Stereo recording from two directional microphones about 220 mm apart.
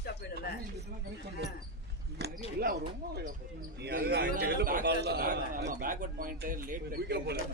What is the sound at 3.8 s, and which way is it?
A man's voice, 45° right (ahead or behind).